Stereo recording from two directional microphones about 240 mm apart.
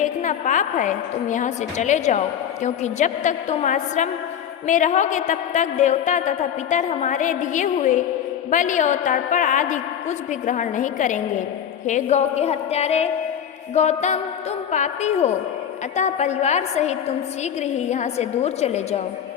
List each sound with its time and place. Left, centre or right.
0.0 s a woman's voice: left